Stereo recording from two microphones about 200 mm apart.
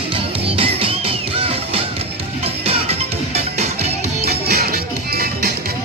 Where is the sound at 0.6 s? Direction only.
25° right (ahead or behind).